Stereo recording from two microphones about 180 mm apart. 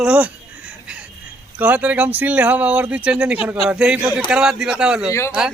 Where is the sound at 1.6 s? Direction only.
10° right (ahead or behind).